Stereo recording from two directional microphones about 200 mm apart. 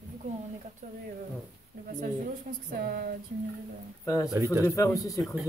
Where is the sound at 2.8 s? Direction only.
45° right (ahead or behind).